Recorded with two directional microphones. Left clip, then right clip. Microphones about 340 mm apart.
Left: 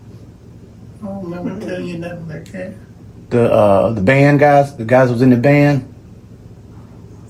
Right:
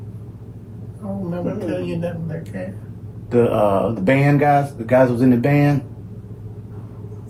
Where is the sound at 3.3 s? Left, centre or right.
Left.